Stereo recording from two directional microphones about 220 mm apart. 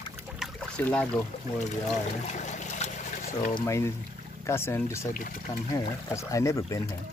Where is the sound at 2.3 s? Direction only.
30° left (ahead or behind).